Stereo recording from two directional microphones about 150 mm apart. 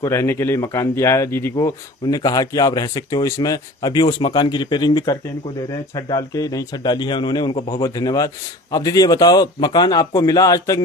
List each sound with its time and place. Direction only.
0.0 s speech: 20° left (ahead or behind)